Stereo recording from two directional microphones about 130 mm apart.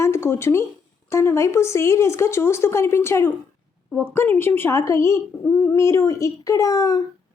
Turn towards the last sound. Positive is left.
turn(degrees=25)  # may be behind; listen again after turning